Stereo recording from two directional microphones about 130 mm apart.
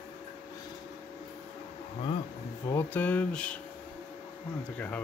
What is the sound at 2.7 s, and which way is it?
Speech, 15° left (ahead or behind).